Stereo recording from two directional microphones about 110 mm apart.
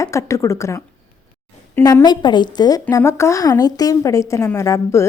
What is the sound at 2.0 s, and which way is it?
A woman's voice, 45° left (ahead or behind).